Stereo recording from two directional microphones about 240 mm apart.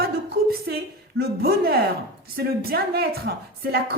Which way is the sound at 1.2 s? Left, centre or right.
Right.